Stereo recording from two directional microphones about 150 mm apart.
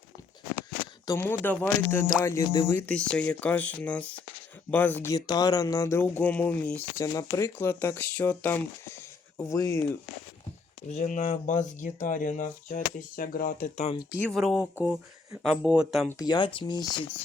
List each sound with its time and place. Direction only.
1.0 s speech: 15° left (ahead or behind)
2.7 s speech: 10° left (ahead or behind)
5.1 s speech: 25° left (ahead or behind)
10.8 s speech: 55° left (ahead or behind); by 13.7 s 70° left (ahead or behind)
14.3 s speech: centre (ahead or behind)
14.6 s speech: 10° right (ahead or behind)
16.1 s speech: 25° left (ahead or behind)